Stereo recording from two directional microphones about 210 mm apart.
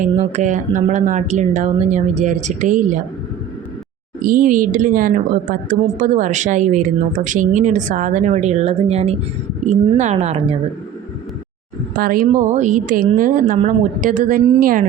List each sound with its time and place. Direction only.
0.0 s a woman's voice: 35° right (ahead or behind)
4.2 s a woman's voice: 40° right (ahead or behind)
11.9 s a woman's voice: 40° right (ahead or behind)